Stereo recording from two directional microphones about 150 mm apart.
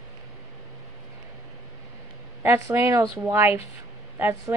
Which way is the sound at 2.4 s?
15° right (ahead or behind).